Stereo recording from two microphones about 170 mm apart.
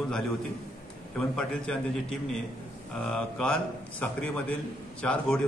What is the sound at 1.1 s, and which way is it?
A man's voice, 5° left (ahead or behind).